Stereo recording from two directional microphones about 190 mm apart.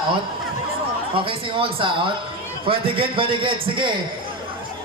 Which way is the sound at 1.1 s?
30° right (ahead or behind).